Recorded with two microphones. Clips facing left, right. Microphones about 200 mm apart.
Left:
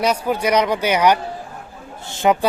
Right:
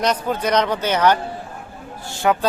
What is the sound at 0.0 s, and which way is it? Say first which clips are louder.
A man's voice: left 2 dB; 10° left (ahead or behind).